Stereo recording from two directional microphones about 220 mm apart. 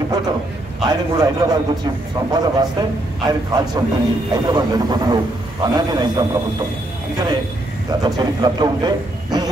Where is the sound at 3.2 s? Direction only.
20° right (ahead or behind).